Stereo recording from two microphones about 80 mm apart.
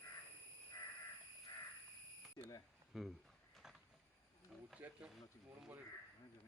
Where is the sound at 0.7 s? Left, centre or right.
Left.